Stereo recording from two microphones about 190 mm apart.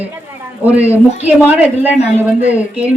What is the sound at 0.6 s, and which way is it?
A woman's voice, 10° right (ahead or behind).